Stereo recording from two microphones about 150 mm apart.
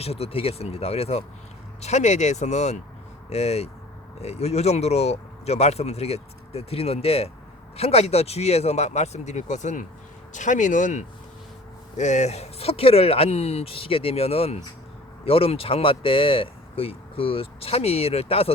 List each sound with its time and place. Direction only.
0.0 s speech: 40° left (ahead or behind)